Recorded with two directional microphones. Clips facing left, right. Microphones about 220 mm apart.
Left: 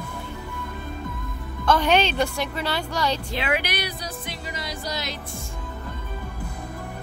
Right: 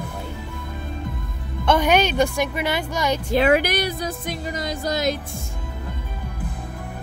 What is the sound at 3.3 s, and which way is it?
Speech, 45° right (ahead or behind).